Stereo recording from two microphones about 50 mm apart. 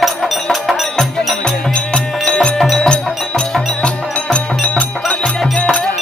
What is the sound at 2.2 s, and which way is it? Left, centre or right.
Music, centre.